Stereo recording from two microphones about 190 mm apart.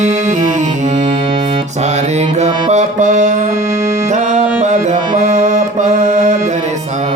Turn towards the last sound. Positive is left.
turn(degrees=-40)  # may be behind; listen again after turning